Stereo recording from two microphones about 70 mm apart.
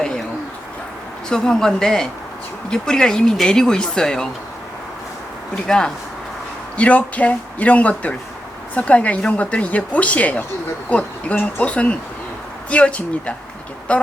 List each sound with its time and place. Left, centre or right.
1.3 s speech: centre
5.6 s speech: centre
6.7 s a woman's voice: centre